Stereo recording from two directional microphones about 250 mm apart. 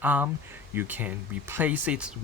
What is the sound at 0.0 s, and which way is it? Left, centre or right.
Speech, centre.